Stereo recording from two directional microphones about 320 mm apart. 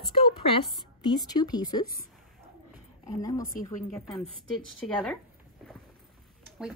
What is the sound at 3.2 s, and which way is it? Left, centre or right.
Speech, centre.